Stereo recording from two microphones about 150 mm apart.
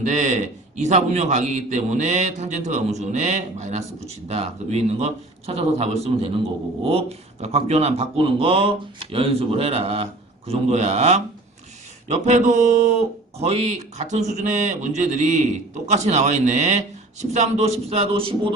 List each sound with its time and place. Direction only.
0.0 s speech: 50° right (ahead or behind); by 18.3 s 35° right (ahead or behind)